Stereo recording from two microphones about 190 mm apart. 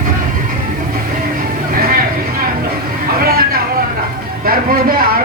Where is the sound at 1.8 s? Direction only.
50° right (ahead or behind).